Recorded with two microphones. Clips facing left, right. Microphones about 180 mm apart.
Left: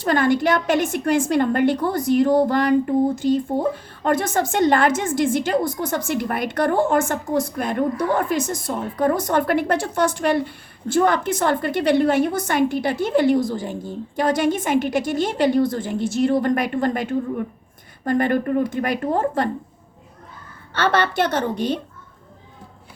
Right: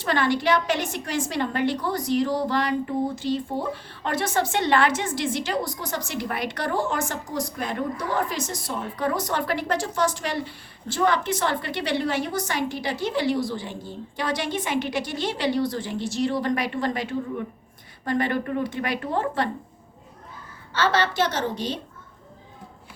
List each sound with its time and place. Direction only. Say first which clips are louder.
0.0 s a woman's voice: left 5 dB; 45° left (ahead or behind)
20.7 s a woman's voice: left 3 dB; 55° left (ahead or behind)